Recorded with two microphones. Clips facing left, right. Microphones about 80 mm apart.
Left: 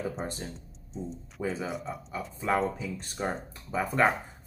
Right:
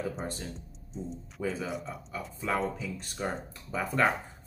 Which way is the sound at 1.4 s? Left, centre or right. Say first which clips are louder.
Left 1 dB; left.